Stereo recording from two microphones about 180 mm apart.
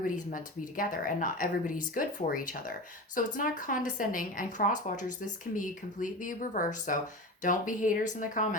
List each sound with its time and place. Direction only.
0.3 s a woman's voice: 50° left (ahead or behind)